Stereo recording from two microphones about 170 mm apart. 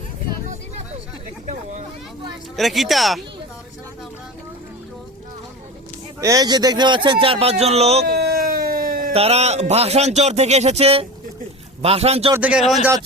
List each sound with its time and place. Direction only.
2.6 s speech: centre (ahead or behind)
6.1 s a man's voice: 20° right (ahead or behind); by 8.0 s 35° right (ahead or behind)
8.0 s a sound: 65° right (ahead or behind)
9.1 s speech: 40° right (ahead or behind)
12.3 s a man's voice: 10° right (ahead or behind)